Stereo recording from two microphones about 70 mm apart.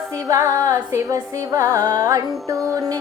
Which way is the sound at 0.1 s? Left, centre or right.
Right.